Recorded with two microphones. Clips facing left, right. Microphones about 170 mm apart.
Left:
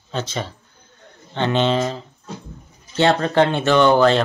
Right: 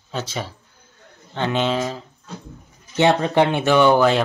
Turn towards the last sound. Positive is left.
turn(degrees=-10)  # may be behind; listen again after turning